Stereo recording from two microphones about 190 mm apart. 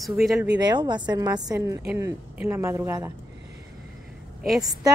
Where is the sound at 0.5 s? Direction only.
20° right (ahead or behind).